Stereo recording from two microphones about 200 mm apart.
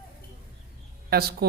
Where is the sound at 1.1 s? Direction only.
50° right (ahead or behind).